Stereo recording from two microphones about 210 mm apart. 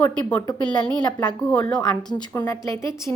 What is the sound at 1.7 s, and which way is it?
A woman's voice, 20° left (ahead or behind).